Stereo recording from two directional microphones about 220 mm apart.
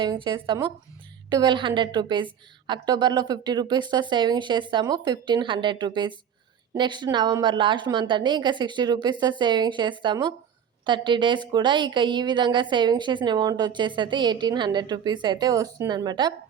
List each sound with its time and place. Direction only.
0.0 s a woman's voice: 20° right (ahead or behind)